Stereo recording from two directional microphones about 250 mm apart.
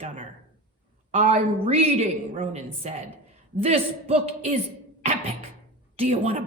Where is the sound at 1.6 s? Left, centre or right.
Right.